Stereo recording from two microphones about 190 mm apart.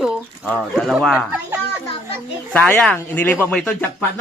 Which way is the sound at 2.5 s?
5° left (ahead or behind).